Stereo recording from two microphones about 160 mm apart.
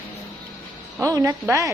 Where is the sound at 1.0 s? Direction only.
20° right (ahead or behind).